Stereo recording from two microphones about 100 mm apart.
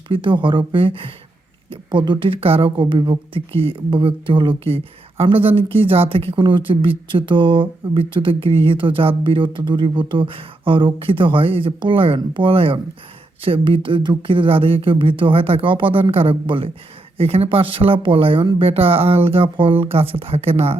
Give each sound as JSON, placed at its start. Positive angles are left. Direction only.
{"t": 0.1, "sound": "speech", "side_deg": -55}
{"t": 17.2, "sound": "speech", "side_deg": -75}